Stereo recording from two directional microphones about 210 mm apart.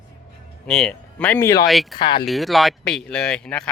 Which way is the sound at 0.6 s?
5° left (ahead or behind).